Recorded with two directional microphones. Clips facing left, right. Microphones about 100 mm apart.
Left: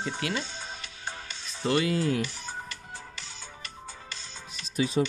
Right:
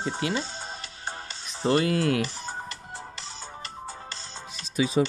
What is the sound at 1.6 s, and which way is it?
Speech, 35° right (ahead or behind).